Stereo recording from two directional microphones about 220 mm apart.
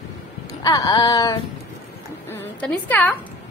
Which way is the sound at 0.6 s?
15° left (ahead or behind).